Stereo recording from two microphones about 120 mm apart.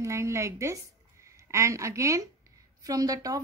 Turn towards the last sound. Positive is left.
turn(degrees=-30)  # may be behind; listen again after turning